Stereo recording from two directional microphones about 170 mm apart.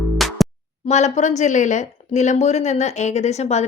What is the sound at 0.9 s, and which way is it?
Speech, 40° left (ahead or behind).